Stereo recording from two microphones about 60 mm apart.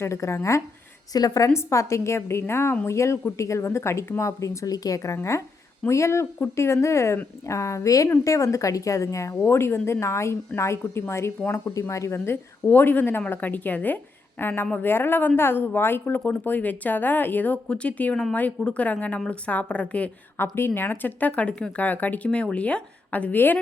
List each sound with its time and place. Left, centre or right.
0.0 s a woman's voice: left
1.1 s a woman's voice: left
1.5 s a woman's voice: left
5.1 s a woman's voice: left
9.5 s a woman's voice: left
11.5 s a woman's voice: left
12.1 s speech: left
18.1 s speech: centre
18.3 s speech: left
20.3 s speech: left
22.3 s speech: centre